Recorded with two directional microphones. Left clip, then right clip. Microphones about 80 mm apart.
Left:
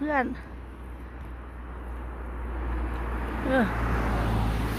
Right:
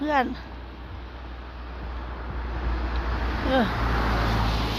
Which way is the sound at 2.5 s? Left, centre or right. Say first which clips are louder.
Right 3 dB; right.